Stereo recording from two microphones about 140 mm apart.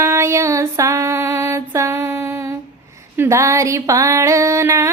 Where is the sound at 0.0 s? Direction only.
20° right (ahead or behind).